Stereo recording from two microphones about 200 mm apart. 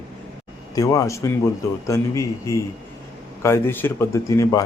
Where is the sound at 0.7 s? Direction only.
15° left (ahead or behind).